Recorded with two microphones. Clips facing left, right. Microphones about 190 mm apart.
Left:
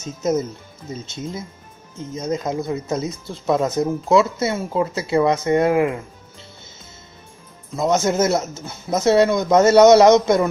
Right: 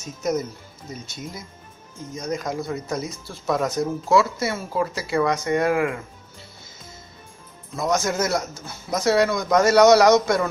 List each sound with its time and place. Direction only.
0.0 s speech: 25° left (ahead or behind)
7.7 s speech: 25° left (ahead or behind)